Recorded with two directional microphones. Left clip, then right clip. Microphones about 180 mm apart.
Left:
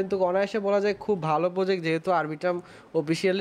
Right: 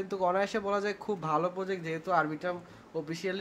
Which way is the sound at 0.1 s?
20° left (ahead or behind).